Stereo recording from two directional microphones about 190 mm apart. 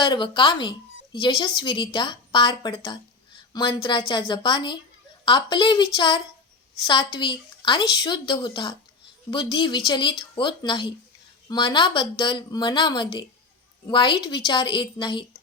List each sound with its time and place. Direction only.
0.0 s a woman's voice: 25° left (ahead or behind)